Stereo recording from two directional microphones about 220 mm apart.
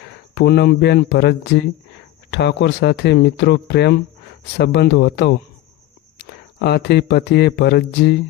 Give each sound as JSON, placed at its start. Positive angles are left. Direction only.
{"t": 0.3, "sound": "speech", "side_deg": 50}